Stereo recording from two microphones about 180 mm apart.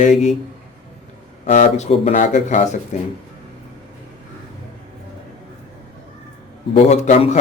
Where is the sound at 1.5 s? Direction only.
40° left (ahead or behind).